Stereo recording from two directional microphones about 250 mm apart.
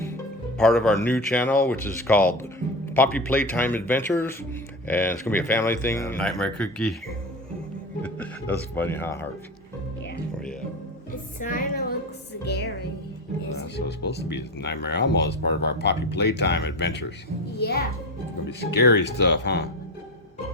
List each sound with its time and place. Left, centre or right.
0.6 s speech: centre
8.0 s speech: centre
11.3 s music: left
12.5 s a child's voice: left